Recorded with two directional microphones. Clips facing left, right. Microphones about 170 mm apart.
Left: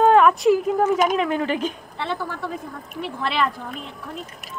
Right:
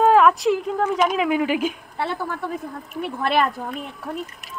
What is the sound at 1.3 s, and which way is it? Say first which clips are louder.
Speech: right 2 dB; 10° right (ahead or behind).